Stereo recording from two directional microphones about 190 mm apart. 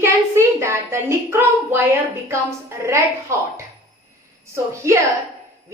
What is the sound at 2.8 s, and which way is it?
Speech, 15° right (ahead or behind).